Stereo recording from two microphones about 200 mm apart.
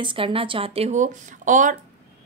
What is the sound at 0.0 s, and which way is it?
A woman's voice, 25° right (ahead or behind).